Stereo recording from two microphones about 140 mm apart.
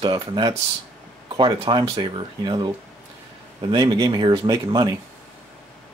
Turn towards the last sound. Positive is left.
turn(degrees=-30)  # may be behind; listen again after turning